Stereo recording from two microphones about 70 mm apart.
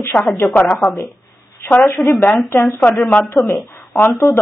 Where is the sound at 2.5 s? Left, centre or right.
Left.